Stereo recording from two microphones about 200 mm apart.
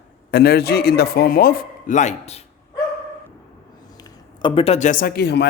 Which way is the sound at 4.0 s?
20° left (ahead or behind).